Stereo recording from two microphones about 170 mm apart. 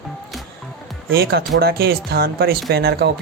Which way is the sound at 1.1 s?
65° right (ahead or behind).